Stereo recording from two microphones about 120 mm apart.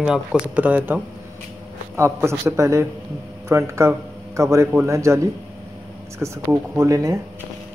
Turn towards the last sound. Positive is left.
turn(degrees=-25)  # may be behind; listen again after turning